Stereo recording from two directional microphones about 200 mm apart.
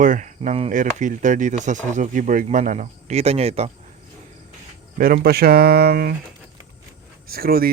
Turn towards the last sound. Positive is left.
turn(degrees=-50)  # may be behind; listen again after turning